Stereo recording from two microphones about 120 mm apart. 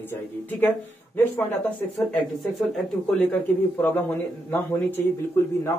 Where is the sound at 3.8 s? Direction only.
15° left (ahead or behind).